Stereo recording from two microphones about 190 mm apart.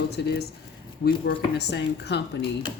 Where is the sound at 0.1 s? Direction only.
60° left (ahead or behind).